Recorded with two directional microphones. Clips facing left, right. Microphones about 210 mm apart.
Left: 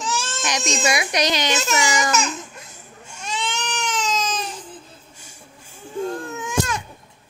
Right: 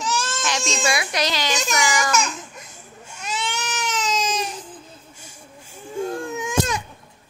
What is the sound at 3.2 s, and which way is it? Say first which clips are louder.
Baby cry: left 1 dB; 5° right (ahead or behind).